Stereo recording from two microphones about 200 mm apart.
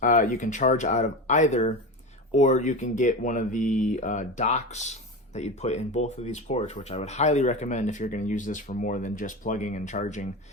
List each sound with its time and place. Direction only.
0.0 s speech: 40° left (ahead or behind)